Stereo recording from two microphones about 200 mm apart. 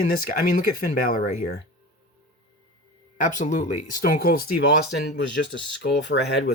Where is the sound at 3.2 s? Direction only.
40° left (ahead or behind).